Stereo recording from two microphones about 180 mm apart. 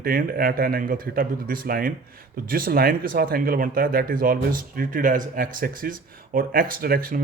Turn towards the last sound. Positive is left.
turn(degrees=-55)  # may be behind; listen again after turning